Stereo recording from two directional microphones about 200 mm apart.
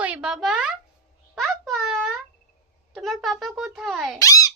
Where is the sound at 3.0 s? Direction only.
Centre (ahead or behind).